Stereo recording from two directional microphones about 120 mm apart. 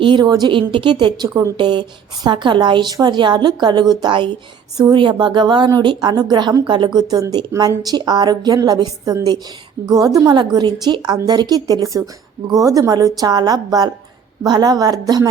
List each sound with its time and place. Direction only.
0.0 s speech: 40° right (ahead or behind)